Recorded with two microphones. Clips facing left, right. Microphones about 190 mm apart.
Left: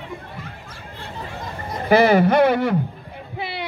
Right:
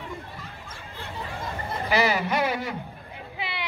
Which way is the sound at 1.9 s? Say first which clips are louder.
Left 10 dB; 55° left (ahead or behind).